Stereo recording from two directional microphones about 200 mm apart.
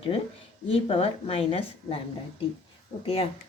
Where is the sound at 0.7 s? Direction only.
30° left (ahead or behind).